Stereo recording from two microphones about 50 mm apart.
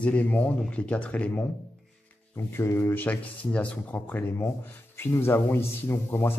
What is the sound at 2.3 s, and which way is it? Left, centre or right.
Speech, left.